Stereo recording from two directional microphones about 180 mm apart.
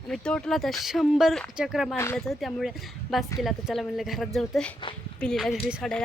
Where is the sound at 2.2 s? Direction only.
Centre (ahead or behind).